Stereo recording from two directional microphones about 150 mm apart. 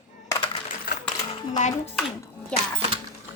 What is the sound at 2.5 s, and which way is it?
Speech, 5° left (ahead or behind).